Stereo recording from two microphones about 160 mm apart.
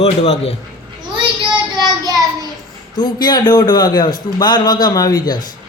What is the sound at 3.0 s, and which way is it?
A man's voice, 25° left (ahead or behind).